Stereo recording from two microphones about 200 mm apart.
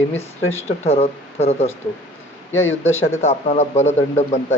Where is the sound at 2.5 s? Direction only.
10° left (ahead or behind).